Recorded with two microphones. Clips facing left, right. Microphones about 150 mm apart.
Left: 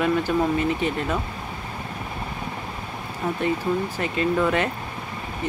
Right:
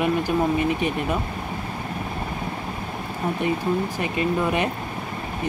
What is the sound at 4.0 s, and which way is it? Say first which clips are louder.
Speech: left 1 dB; 15° right (ahead or behind).